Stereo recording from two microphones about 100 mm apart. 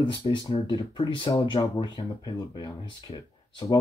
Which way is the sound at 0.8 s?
50° left (ahead or behind).